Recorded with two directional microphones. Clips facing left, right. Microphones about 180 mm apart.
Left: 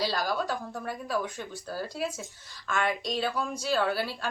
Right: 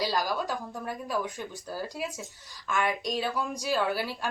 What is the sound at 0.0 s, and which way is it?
Speech, 15° right (ahead or behind).